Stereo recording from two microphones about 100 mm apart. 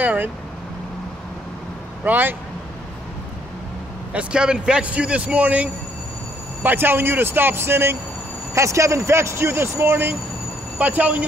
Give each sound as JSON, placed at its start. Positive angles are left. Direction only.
{"t": 0.0, "sound": "vehicle", "side_deg": -15}
{"t": 2.0, "sound": "speech", "side_deg": -20}
{"t": 4.1, "sound": "a man's voice", "side_deg": -10}